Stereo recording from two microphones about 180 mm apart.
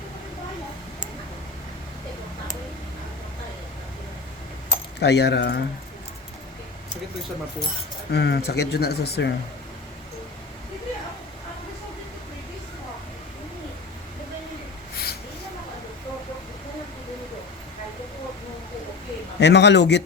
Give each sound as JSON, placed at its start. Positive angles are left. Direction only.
{"t": 4.9, "sound": "speech", "side_deg": 70}
{"t": 8.1, "sound": "speech", "side_deg": 65}
{"t": 19.4, "sound": "speech", "side_deg": 70}